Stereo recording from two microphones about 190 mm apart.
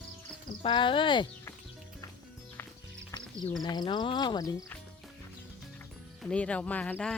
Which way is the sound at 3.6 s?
20° left (ahead or behind).